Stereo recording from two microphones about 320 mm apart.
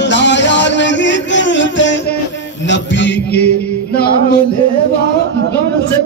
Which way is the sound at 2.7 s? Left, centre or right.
Left.